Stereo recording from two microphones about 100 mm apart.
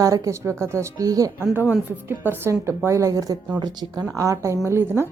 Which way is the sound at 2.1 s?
25° right (ahead or behind).